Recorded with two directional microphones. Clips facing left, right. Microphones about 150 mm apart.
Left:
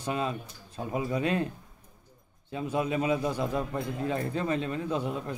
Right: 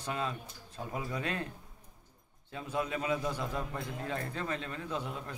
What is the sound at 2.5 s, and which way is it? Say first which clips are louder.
A man's voice: left 6 dB; 15° left (ahead or behind).